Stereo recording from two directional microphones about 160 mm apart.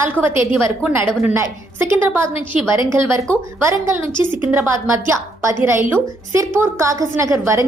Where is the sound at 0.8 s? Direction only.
10° right (ahead or behind).